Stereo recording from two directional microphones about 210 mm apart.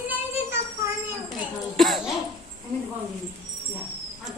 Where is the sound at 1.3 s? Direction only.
Centre (ahead or behind).